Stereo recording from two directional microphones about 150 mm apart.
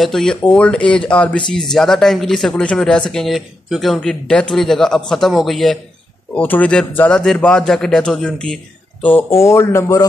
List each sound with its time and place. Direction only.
0.0 s speech: 5° left (ahead or behind)
6.3 s speech: 10° left (ahead or behind)